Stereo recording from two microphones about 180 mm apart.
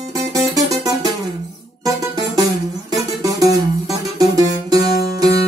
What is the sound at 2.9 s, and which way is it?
Music, 20° right (ahead or behind).